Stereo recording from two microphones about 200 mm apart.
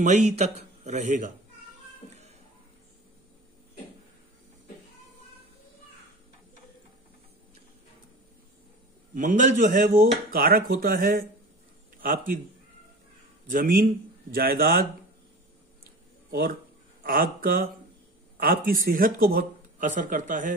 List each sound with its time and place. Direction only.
0.0 s speech: 35° right (ahead or behind)
9.1 s speech: 40° right (ahead or behind)
13.5 s speech: 45° right (ahead or behind)
16.3 s speech: 50° right (ahead or behind)
18.7 s speech: 45° right (ahead or behind)